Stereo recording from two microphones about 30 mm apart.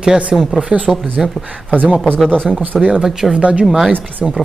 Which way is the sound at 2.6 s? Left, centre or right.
Right.